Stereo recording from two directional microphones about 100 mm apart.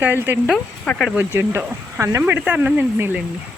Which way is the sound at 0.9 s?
5° left (ahead or behind).